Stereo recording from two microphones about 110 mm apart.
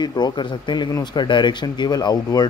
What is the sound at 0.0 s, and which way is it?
Speech, 40° left (ahead or behind).